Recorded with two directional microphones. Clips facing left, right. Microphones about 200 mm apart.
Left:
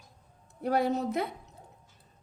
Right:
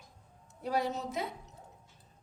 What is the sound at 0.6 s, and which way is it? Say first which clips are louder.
Speech: left 6 dB; 55° left (ahead or behind).